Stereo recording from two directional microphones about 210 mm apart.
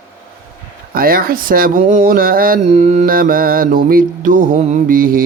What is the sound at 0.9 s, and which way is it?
Speech, 45° right (ahead or behind).